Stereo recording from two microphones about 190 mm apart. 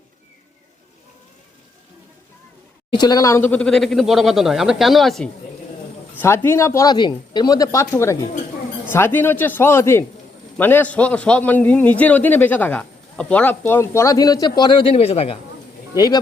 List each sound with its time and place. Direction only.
2.9 s speech: 20° left (ahead or behind); by 5.3 s centre (ahead or behind)
6.1 s a man's voice: 10° left (ahead or behind); by 15.4 s 30° left (ahead or behind)
16.0 s speech: 20° left (ahead or behind)